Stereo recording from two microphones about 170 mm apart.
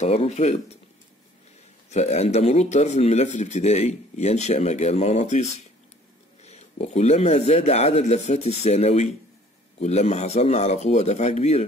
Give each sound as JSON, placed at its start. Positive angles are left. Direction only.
{"t": 0.0, "sound": "speech", "side_deg": 40}
{"t": 1.9, "sound": "speech", "side_deg": 40}